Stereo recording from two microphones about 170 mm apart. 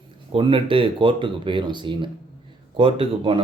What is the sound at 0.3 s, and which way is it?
Speech, 30° right (ahead or behind).